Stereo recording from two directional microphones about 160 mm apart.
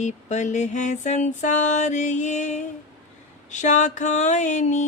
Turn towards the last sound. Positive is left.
turn(degrees=50)  # may be behind; listen again after turning